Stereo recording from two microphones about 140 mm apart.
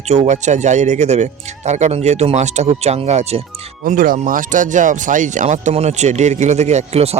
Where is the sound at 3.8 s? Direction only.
80° right; by 7.2 s 50° right (ahead or behind).